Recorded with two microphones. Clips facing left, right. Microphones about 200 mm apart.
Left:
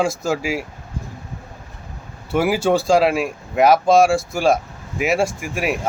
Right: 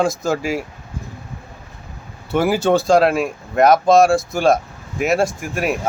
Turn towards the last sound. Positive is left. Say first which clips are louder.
# right 1 dB
turn(degrees=5)  # may be behind; listen again after turning